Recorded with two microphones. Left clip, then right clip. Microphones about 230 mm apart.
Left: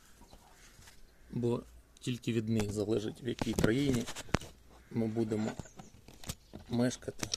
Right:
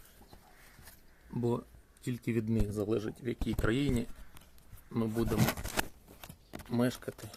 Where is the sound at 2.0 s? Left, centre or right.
Left.